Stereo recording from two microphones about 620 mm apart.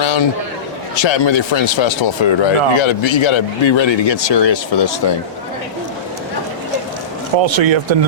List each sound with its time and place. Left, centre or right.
0.0 s a sound: left
1.1 s speech: left
7.3 s speech: right